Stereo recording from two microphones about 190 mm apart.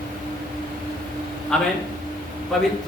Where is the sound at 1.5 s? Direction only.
5° left (ahead or behind).